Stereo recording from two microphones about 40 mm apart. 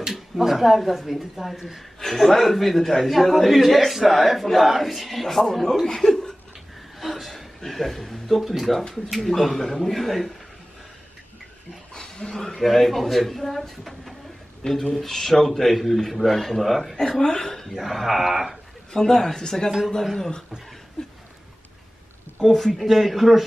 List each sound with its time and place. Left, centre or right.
0.1 s a man's voice: centre
2.0 s a sound: centre
2.2 s a man's voice: centre
7.0 s a man's voice: centre
11.9 s dog: left
12.5 s a man's voice: centre
14.6 s speech: left
15.0 s a man's voice: centre
17.2 s a man's voice: centre
18.9 s speech: centre
21.0 s a sound: centre
22.4 s a man's voice: centre